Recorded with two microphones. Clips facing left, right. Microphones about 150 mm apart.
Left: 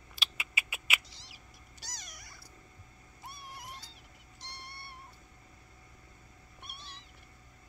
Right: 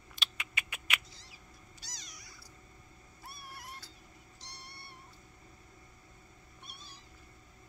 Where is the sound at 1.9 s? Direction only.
50° left (ahead or behind).